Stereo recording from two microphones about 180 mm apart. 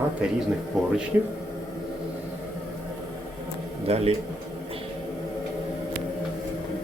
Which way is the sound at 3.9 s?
35° right (ahead or behind).